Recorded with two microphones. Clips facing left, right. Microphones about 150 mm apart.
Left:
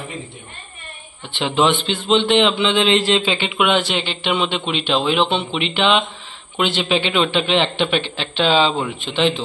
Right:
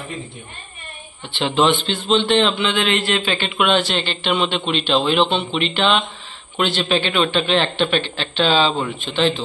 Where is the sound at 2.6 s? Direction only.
25° left (ahead or behind).